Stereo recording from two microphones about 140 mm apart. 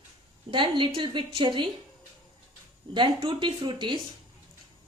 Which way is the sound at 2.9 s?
35° right (ahead or behind).